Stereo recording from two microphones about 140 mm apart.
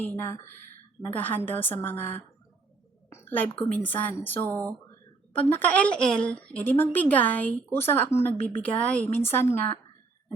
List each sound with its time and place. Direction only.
0.0 s a woman's voice: 15° left (ahead or behind)
3.1 s a sound: 15° left (ahead or behind)
3.8 s a woman's voice: 10° left (ahead or behind)